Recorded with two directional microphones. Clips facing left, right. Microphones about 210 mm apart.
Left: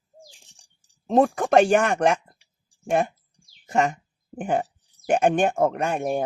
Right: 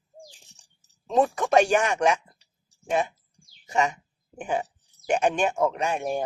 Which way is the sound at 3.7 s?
55° left (ahead or behind).